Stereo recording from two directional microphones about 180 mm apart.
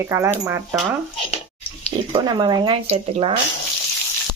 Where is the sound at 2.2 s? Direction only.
25° right (ahead or behind).